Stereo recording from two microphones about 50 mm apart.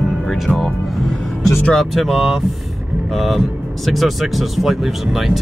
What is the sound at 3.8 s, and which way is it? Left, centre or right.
Speech, centre.